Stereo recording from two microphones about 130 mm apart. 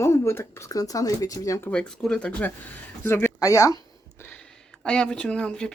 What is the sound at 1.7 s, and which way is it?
Speech, 5° left (ahead or behind).